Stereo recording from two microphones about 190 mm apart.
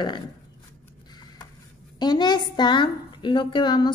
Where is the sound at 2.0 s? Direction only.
20° left (ahead or behind).